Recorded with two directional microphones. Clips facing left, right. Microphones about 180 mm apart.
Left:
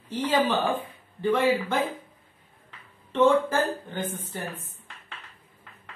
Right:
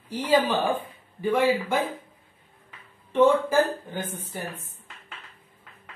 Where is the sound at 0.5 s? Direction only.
10° right (ahead or behind).